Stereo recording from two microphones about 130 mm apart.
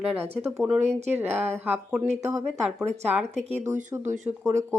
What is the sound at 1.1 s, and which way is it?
Speech, 15° right (ahead or behind).